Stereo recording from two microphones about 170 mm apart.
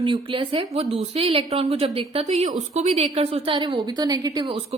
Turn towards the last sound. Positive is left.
turn(degrees=-25)  # may be behind; listen again after turning